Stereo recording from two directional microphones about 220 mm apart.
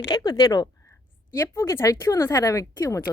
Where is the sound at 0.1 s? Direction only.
20° left (ahead or behind).